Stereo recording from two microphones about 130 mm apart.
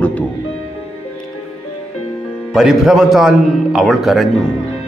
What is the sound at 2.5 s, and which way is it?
A man's voice, 5° right (ahead or behind).